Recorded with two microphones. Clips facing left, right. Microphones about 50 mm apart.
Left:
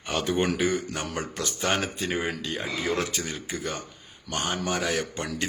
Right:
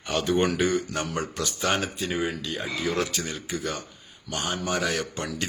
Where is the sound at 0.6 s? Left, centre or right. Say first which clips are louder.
Right 1 dB; centre.